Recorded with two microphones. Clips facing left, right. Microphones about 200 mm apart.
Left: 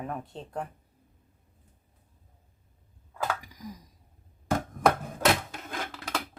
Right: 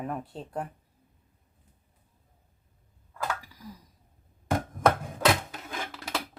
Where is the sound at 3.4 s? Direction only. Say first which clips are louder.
Left 3 dB; 15° left (ahead or behind).